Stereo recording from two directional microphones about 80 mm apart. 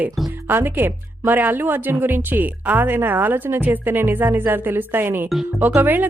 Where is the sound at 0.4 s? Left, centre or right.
Right.